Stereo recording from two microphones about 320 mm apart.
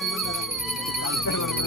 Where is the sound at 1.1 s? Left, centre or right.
Left.